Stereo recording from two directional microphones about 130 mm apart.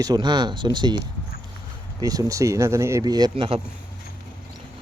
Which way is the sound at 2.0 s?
25° right (ahead or behind).